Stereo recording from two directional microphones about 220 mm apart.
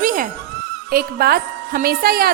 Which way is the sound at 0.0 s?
40° right (ahead or behind).